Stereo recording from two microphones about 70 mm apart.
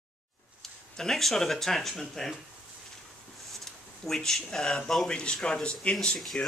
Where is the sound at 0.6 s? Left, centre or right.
Centre.